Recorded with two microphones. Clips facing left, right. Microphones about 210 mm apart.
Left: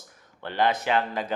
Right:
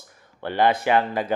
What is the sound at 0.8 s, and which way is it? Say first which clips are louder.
Speech: right 5 dB; 55° right (ahead or behind).